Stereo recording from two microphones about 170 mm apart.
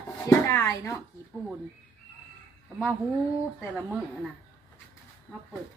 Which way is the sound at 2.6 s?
5° right (ahead or behind).